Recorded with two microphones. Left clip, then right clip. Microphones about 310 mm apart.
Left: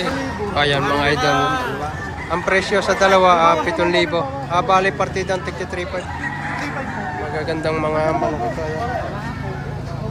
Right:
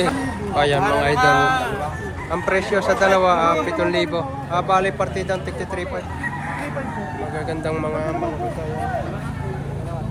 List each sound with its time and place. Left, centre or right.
0.5 s speech: centre
7.3 s speech: centre